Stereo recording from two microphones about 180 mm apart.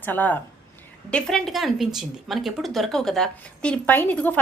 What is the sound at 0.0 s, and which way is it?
A woman's voice, 10° left (ahead or behind).